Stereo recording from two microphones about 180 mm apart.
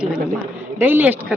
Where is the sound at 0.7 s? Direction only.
10° right (ahead or behind).